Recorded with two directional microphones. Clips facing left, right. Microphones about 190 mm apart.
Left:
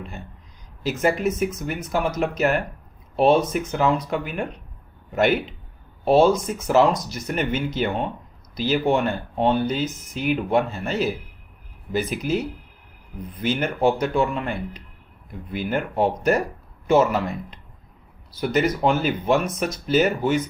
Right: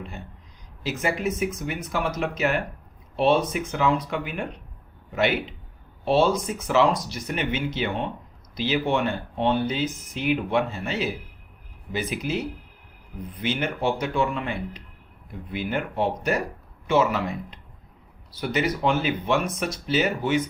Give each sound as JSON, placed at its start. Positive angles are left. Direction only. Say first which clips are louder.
{"t": 0.8, "sound": "speech", "louder": "left 5 dB", "side_deg": 45}
{"t": 13.4, "sound": "speech", "louder": "left 5 dB", "side_deg": 45}